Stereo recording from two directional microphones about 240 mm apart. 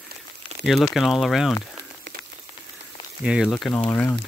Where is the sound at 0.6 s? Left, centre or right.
Centre.